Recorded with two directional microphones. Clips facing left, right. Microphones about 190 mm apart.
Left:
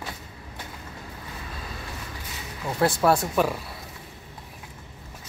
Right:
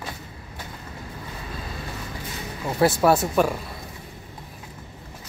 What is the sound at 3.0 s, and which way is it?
Speech, centre (ahead or behind).